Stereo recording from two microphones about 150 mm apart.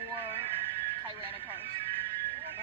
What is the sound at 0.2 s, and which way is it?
Music, 15° right (ahead or behind).